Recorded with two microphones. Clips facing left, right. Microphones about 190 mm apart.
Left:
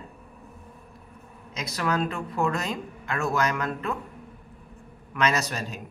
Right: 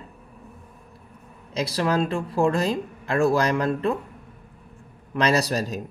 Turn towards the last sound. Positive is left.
turn(degrees=-35)  # may be behind; listen again after turning